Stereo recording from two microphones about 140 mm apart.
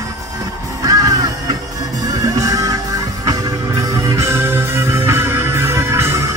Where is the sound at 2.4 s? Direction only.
25° right (ahead or behind).